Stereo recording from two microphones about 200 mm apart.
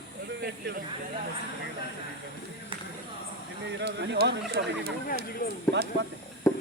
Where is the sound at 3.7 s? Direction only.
60° right (ahead or behind).